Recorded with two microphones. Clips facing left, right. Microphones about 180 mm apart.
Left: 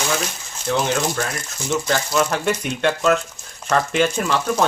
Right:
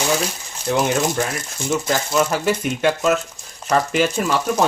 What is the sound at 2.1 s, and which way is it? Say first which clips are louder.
Speech: right 2 dB; 5° right (ahead or behind).